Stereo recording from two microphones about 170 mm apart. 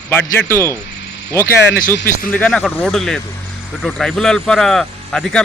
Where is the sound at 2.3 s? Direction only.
5° left (ahead or behind).